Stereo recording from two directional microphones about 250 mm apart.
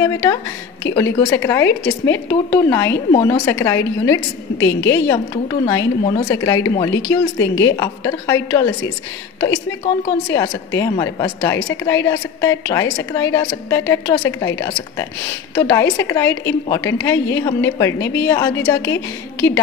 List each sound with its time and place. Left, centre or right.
0.0 s a woman's voice: centre
3.1 s a woman's voice: left
6.0 s a woman's voice: left
6.3 s a woman's voice: centre